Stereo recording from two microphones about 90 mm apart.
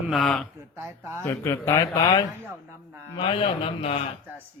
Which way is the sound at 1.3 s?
35° left (ahead or behind).